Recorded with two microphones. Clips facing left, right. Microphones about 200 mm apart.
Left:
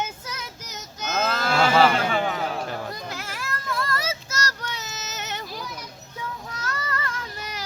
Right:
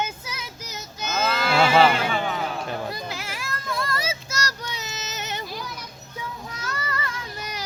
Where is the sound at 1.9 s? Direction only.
40° left (ahead or behind).